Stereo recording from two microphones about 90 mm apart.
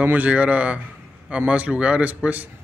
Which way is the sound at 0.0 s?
20° right (ahead or behind).